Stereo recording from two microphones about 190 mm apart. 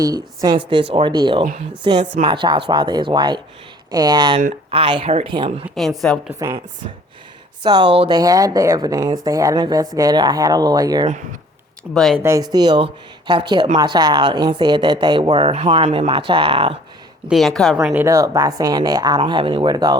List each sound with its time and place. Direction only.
0.0 s speech: 20° right (ahead or behind)
6.0 s a woman's voice: centre (ahead or behind)
7.6 s speech: 25° right (ahead or behind)
11.9 s a woman's voice: centre (ahead or behind)
12.2 s speech: 20° right (ahead or behind)
17.2 s a woman's voice: centre (ahead or behind)
17.8 s speech: 10° right (ahead or behind)